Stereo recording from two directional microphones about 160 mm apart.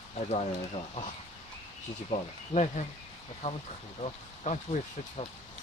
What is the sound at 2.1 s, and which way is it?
Speech, 45° left (ahead or behind).